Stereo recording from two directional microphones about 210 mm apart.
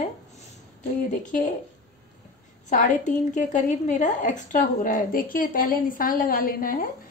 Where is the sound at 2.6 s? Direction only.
35° left (ahead or behind).